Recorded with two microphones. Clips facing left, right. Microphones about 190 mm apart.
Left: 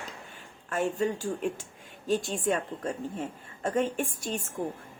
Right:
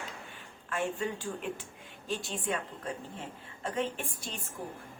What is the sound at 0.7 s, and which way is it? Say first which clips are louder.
A woman's voice: left 5 dB; 40° left (ahead or behind).